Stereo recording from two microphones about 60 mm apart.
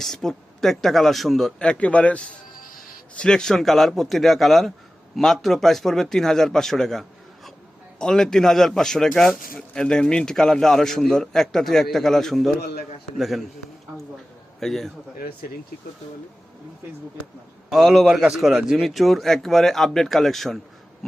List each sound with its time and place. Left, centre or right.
0.0 s a man's voice: centre
1.5 s a man's voice: centre
14.6 s a man's voice: centre
17.7 s a man's voice: centre